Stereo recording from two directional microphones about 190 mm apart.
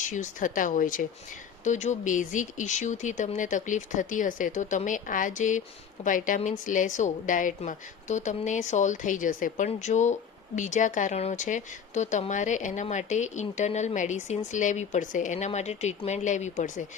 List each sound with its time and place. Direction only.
0.1 s a woman's voice: 40° left (ahead or behind)